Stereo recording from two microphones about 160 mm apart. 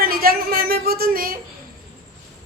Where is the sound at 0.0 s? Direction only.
65° right (ahead or behind).